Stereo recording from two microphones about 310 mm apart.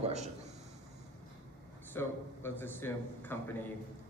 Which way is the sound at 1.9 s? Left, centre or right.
Centre.